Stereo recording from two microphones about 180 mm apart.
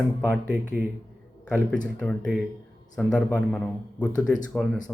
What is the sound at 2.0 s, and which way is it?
A man's voice, 5° left (ahead or behind).